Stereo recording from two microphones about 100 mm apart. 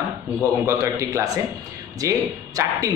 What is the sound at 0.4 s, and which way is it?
A man's voice, 30° right (ahead or behind).